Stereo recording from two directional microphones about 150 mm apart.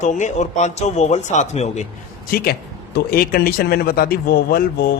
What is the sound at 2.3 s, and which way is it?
A man's voice, 90° left.